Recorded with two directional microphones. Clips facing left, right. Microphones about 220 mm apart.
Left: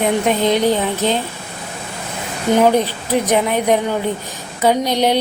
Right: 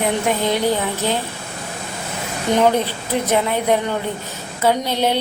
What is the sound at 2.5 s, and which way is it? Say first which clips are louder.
A woman's voice: left 3 dB; 10° left (ahead or behind).